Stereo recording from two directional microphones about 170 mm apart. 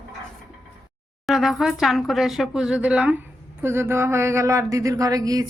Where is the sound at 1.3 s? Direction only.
Centre (ahead or behind).